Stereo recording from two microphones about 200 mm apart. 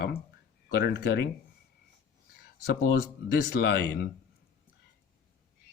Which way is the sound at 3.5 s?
55° left (ahead or behind).